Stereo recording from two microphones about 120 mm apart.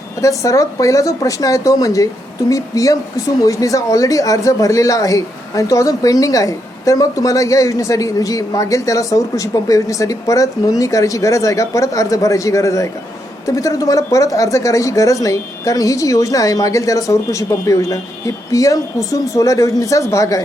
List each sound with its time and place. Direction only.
0.2 s speech: 25° left (ahead or behind)